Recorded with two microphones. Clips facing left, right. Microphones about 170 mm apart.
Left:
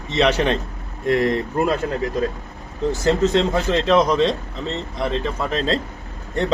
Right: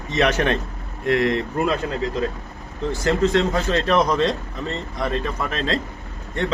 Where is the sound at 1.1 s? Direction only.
40° left (ahead or behind).